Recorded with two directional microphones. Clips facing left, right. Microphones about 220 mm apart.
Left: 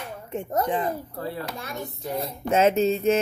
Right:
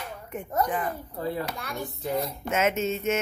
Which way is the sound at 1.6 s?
25° left (ahead or behind).